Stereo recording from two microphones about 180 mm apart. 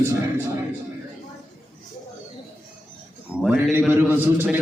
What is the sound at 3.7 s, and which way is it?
Speech, 10° right (ahead or behind).